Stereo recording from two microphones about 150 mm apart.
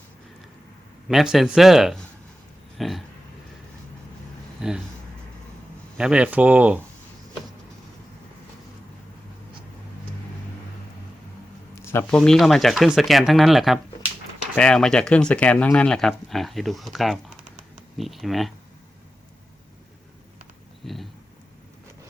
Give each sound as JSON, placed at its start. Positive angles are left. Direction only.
{"t": 1.0, "sound": "speech", "side_deg": 0}
{"t": 4.6, "sound": "speech", "side_deg": -5}
{"t": 6.0, "sound": "speech", "side_deg": -5}
{"t": 11.7, "sound": "a sound", "side_deg": 15}
{"t": 12.1, "sound": "speech", "side_deg": 5}
{"t": 20.8, "sound": "a sound", "side_deg": 0}